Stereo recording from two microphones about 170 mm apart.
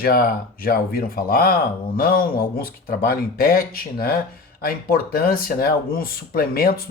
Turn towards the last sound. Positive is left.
turn(degrees=60)  # may be behind; listen again after turning